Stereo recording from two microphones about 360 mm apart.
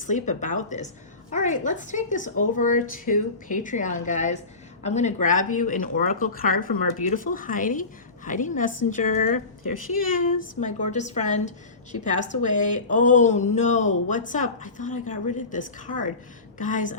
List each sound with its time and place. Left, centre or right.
0.0 s a woman's voice: left